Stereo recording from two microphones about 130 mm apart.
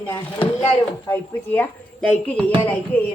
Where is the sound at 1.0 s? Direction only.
20° left (ahead or behind).